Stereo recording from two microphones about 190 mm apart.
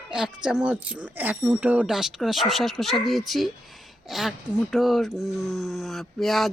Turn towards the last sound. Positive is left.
turn(degrees=0)  # may be behind; listen again after turning